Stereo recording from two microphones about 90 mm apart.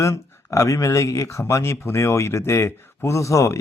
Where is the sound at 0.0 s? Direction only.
35° left (ahead or behind).